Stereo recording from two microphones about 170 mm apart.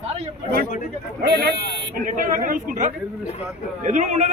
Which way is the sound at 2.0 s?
50° right (ahead or behind).